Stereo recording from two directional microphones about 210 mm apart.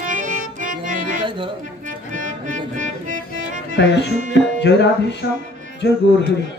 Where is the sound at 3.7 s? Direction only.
55° left (ahead or behind).